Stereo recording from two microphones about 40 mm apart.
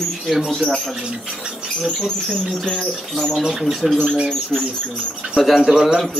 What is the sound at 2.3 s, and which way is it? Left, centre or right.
Chirp, centre.